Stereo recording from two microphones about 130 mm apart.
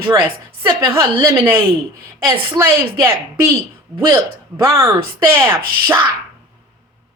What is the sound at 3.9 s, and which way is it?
A woman's voice, 20° right (ahead or behind).